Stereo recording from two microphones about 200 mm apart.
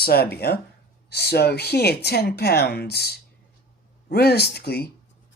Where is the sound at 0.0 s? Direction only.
50° left (ahead or behind).